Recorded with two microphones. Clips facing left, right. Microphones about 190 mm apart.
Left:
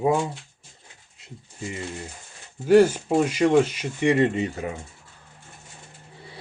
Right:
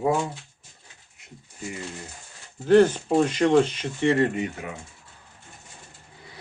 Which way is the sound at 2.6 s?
10° left (ahead or behind).